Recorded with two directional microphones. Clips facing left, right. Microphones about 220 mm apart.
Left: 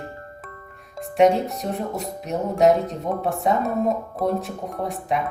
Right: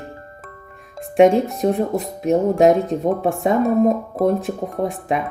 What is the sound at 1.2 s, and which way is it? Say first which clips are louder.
A woman's voice: right 4 dB; 50° right (ahead or behind).